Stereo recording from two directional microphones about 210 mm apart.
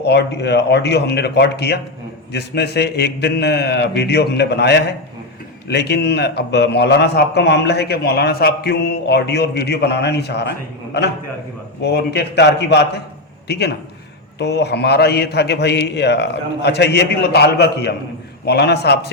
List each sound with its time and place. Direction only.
0.0 s a man's voice: 55° left (ahead or behind)
11.8 s a man's voice: 50° left (ahead or behind)